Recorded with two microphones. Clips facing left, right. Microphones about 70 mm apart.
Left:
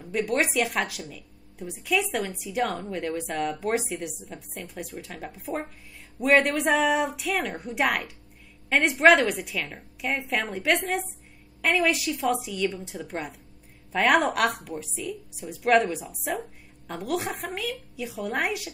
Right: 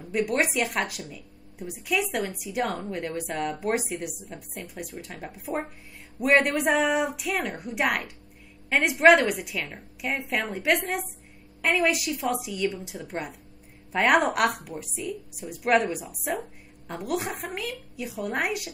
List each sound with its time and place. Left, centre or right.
0.1 s speech: centre
2.6 s a woman's voice: right
3.2 s speech: centre
6.2 s speech: centre